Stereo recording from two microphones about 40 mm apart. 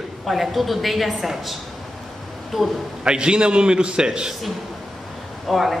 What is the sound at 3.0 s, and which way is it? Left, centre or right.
A man's voice, right.